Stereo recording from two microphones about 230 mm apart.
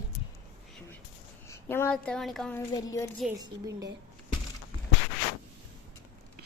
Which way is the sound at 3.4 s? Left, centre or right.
Centre.